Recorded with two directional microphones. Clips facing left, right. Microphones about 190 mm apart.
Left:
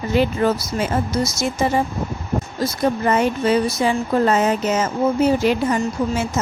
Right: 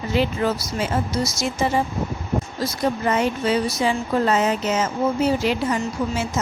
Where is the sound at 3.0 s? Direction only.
50° left (ahead or behind).